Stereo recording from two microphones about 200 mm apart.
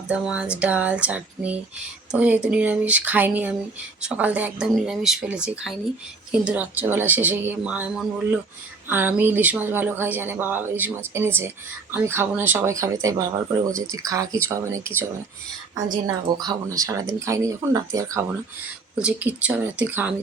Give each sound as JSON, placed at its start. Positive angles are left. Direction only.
{"t": 0.1, "sound": "speech", "side_deg": -5}